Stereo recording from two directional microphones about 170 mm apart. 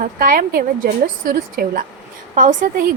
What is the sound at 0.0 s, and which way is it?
A woman's voice, 55° right (ahead or behind).